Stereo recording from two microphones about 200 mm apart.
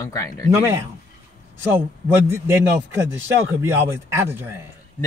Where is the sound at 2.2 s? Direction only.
15° right (ahead or behind).